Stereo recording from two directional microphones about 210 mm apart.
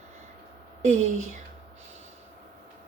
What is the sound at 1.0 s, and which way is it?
Speech, 80° right.